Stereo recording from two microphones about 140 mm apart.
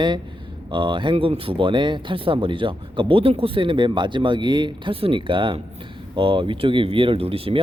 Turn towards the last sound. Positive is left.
turn(degrees=-40)  # may be behind; listen again after turning